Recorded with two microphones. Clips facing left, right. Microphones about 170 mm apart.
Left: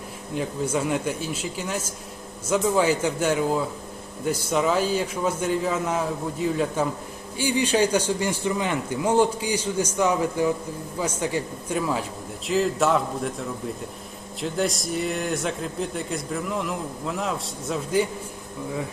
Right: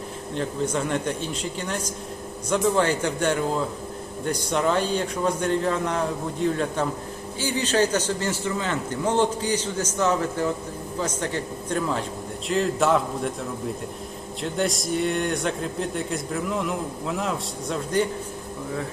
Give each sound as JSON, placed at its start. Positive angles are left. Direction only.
{"t": 0.3, "sound": "a man's voice", "side_deg": 10}
{"t": 14.4, "sound": "speech", "side_deg": 0}